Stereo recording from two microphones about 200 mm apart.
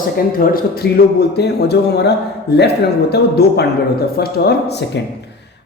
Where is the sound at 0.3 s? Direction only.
50° left (ahead or behind).